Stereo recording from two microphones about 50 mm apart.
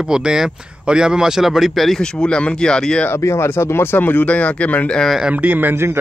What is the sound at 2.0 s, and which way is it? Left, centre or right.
Speech, centre.